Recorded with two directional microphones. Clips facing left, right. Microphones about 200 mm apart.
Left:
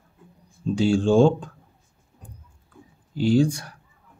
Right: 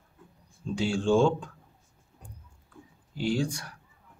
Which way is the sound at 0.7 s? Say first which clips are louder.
Left 6 dB; 35° left (ahead or behind).